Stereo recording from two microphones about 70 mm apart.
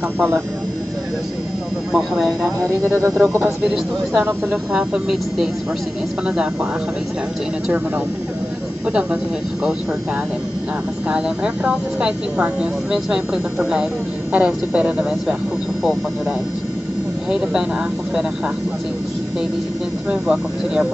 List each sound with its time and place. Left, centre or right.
1.9 s speech: centre
2.9 s speech: right
3.4 s speech: centre
4.2 s speech: right
4.7 s speech: centre
8.9 s speech: centre
11.1 s speech: centre
17.3 s speech: centre
20.1 s speech: centre